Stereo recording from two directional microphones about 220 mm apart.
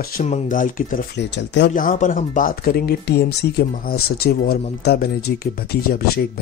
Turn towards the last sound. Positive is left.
turn(degrees=45)  # may be behind; listen again after turning